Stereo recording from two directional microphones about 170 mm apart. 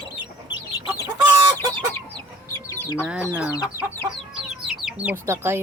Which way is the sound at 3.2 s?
10° right (ahead or behind).